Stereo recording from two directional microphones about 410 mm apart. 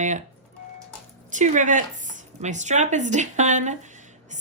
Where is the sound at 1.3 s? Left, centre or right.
Centre.